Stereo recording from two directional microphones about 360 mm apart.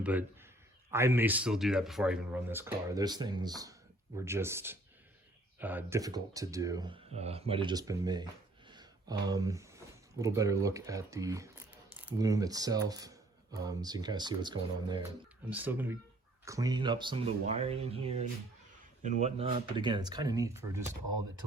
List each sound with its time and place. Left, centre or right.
0.0 s speech: centre